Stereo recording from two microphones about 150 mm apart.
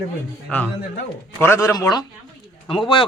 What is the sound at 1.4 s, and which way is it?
Speech, 15° left (ahead or behind).